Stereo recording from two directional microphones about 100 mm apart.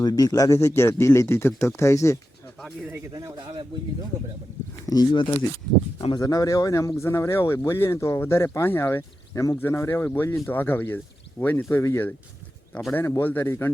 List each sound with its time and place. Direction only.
0.0 s speech: 40° left (ahead or behind)
3.1 s speech: 40° right (ahead or behind)
4.9 s speech: 50° left (ahead or behind); by 13.7 s 25° left (ahead or behind)